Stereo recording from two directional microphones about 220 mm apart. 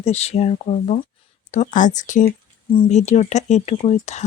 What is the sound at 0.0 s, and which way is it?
Speech, 30° left (ahead or behind).